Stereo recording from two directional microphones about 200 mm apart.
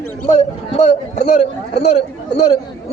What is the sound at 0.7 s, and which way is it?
Speech, 35° left (ahead or behind).